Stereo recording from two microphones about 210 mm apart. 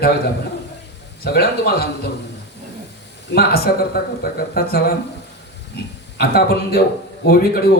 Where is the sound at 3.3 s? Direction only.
50° left (ahead or behind).